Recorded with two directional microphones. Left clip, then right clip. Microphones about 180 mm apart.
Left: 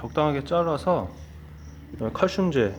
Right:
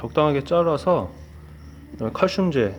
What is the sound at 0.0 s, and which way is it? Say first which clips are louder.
Speech: right 4 dB; 20° right (ahead or behind).